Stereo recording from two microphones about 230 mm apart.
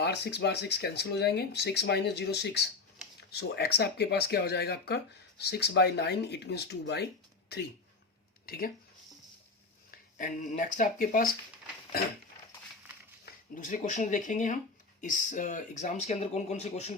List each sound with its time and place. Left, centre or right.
0.0 s speech: left
8.4 s speech: left
10.2 s speech: left
13.2 s speech: left